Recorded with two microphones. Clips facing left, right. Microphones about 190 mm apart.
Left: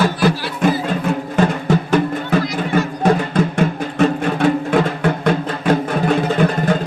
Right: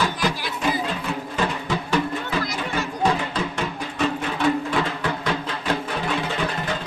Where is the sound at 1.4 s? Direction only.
50° left (ahead or behind).